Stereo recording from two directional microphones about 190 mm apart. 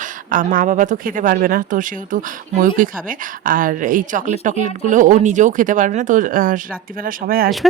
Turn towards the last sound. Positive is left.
turn(degrees=-50)  # may be behind; listen again after turning